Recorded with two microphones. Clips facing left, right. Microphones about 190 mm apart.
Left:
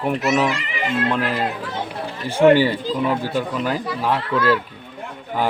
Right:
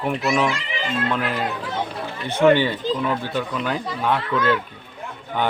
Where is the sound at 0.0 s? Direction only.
Centre (ahead or behind).